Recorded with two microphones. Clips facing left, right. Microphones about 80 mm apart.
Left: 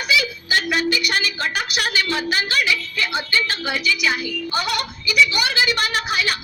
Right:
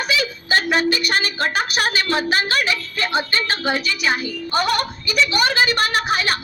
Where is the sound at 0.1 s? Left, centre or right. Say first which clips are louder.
Left 1 dB; right.